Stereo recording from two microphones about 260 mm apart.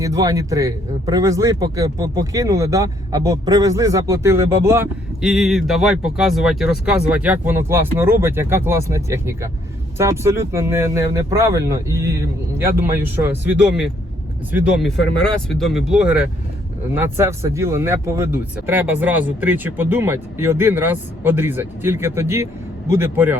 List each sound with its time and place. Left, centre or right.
0.0 s a man's voice: centre
15.2 s a man's voice: centre